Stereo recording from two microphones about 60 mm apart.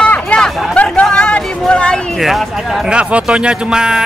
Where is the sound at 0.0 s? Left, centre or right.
Centre.